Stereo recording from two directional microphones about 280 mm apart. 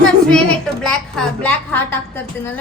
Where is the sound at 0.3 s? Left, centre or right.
Centre.